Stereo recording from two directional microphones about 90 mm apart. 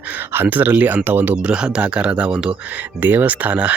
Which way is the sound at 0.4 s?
20° right (ahead or behind).